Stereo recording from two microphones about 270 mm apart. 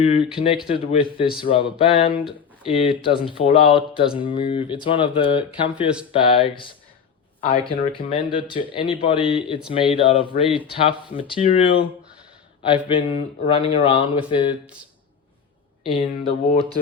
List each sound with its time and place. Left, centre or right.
0.0 s speech: left
15.8 s speech: centre